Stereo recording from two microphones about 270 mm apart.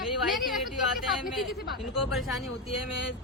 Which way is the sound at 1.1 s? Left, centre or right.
Centre.